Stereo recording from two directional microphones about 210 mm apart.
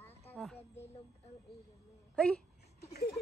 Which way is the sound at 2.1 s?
5° left (ahead or behind).